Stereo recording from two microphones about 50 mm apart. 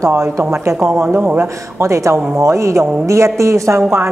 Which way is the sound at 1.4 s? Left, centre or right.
Right.